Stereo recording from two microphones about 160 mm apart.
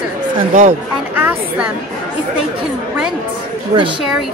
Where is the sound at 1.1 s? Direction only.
10° right (ahead or behind).